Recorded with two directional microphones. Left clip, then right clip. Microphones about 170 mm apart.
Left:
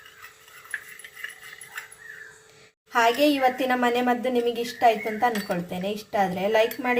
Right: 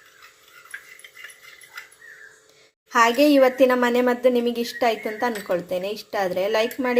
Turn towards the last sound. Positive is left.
turn(degrees=-40)  # may be behind; listen again after turning